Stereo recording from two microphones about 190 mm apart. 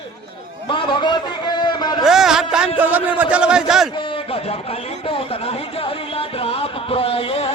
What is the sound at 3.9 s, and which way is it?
Speech, 25° left (ahead or behind).